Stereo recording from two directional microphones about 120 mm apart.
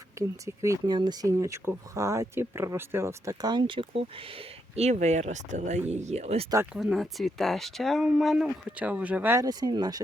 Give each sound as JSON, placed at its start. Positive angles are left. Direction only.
{"t": 0.2, "sound": "speech", "side_deg": -25}
{"t": 0.9, "sound": "speech", "side_deg": -35}
{"t": 3.4, "sound": "speech", "side_deg": -40}
{"t": 4.7, "sound": "speech", "side_deg": -65}
{"t": 6.7, "sound": "speech", "side_deg": 0}
{"t": 8.8, "sound": "speech", "side_deg": -10}
{"t": 9.4, "sound": "speech", "side_deg": -35}